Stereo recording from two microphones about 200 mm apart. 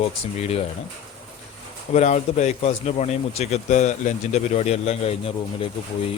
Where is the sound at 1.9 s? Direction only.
35° left (ahead or behind).